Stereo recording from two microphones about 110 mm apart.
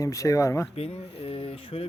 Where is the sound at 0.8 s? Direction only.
60° left (ahead or behind).